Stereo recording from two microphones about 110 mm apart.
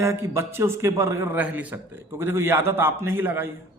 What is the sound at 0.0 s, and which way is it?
A man's voice, 25° right (ahead or behind).